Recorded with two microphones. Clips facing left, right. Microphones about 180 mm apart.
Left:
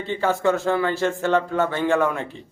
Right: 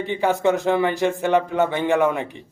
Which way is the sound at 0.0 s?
15° right (ahead or behind).